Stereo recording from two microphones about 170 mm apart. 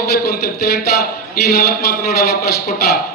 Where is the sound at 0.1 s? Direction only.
65° left (ahead or behind).